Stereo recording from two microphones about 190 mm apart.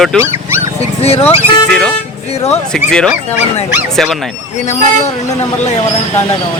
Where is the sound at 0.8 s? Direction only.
30° left (ahead or behind).